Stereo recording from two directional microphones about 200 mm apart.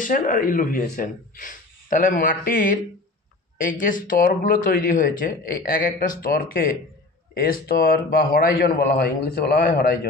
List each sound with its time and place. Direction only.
0.0 s speech: 40° left (ahead or behind)
3.8 s speech: 45° left (ahead or behind)